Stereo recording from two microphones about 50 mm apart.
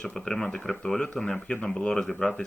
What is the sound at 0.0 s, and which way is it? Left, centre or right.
Speech, centre.